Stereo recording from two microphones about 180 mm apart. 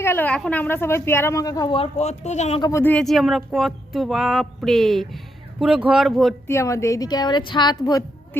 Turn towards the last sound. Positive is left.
turn(degrees=20)  # may be behind; listen again after turning